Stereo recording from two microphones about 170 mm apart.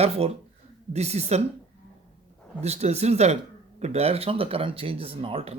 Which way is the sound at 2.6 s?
40° right (ahead or behind).